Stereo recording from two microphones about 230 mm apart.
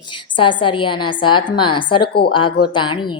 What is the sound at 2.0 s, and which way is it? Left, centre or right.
Speech, left.